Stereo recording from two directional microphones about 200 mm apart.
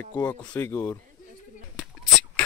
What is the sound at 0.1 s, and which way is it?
Speech, 10° left (ahead or behind).